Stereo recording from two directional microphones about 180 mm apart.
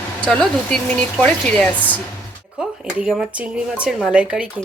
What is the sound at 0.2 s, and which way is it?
Speech, 5° left (ahead or behind).